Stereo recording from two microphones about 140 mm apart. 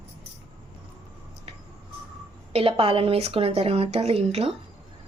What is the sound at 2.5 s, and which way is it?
Speech, 40° right (ahead or behind).